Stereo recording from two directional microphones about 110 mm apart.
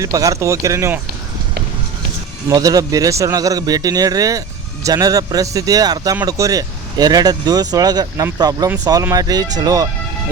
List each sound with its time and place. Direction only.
0.0 s speech: 30° right (ahead or behind)
2.5 s speech: 35° right (ahead or behind)